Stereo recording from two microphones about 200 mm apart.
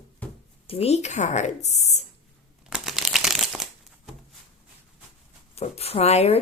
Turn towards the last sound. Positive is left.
turn(degrees=30)  # may be behind; listen again after turning